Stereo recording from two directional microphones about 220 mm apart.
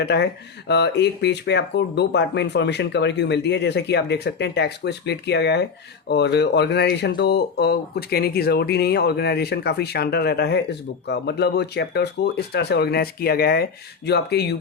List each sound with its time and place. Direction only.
0.0 s speech: 50° left (ahead or behind)